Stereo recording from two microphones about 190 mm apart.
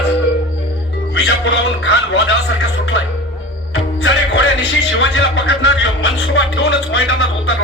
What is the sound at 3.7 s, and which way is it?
Music, 65° left (ahead or behind).